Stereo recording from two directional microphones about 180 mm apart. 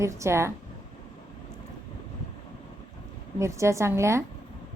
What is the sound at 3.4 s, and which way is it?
Speech, 15° right (ahead or behind).